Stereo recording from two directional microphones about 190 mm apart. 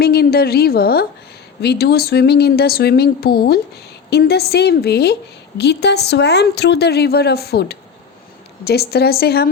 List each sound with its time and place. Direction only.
0.0 s a woman's voice: 55° left (ahead or behind)